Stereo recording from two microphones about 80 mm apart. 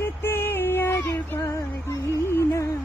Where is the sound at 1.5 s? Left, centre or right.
Left.